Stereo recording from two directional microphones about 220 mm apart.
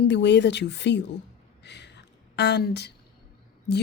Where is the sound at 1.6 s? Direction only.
50° left (ahead or behind).